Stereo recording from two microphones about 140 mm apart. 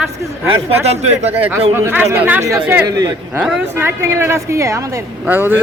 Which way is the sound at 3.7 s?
20° right (ahead or behind).